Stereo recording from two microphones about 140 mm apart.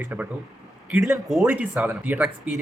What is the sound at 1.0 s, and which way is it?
Speech, centre (ahead or behind).